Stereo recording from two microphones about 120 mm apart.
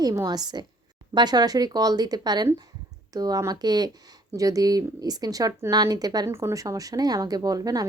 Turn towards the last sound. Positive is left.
turn(degrees=-30)  # may be behind; listen again after turning